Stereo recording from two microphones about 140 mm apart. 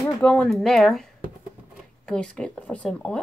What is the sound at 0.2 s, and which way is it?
A woman's voice, 10° left (ahead or behind).